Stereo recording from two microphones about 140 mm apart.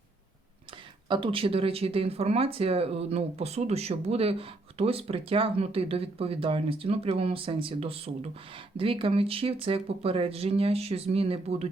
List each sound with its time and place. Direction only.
1.0 s speech: 35° right (ahead or behind)